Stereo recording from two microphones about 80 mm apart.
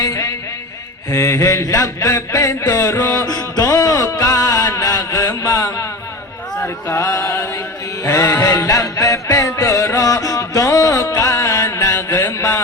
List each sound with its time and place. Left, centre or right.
0.0 s music: left
1.1 s mantra: left
3.2 s music: left
6.6 s a sound: left
8.0 s music: left
8.4 s music: left
12.0 s mantra: left